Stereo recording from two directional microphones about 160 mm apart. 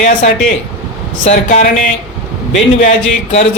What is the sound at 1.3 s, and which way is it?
Speech, 45° left (ahead or behind).